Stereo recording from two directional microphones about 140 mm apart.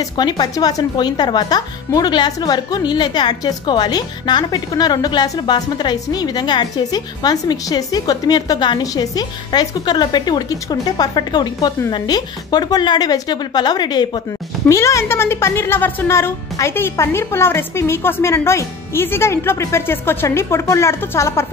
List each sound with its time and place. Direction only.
0.0 s a woman's voice: 30° left (ahead or behind)
14.7 s a woman's voice: 20° left (ahead or behind)